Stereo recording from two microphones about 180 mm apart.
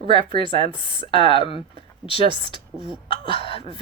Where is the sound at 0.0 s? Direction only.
30° left (ahead or behind).